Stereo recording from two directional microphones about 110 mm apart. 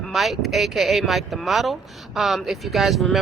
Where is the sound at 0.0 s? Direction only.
Centre (ahead or behind).